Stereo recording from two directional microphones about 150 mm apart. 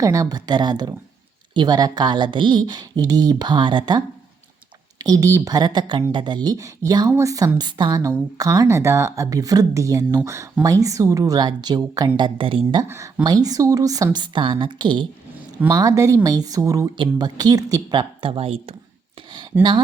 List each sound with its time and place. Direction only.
0.0 s a woman's voice: 25° right (ahead or behind)
5.0 s a woman's voice: 25° right (ahead or behind)
18.2 s speech: 40° right (ahead or behind)
19.5 s speech: 15° right (ahead or behind)